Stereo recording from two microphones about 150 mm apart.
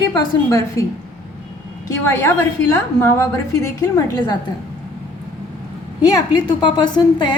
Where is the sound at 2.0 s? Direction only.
15° left (ahead or behind).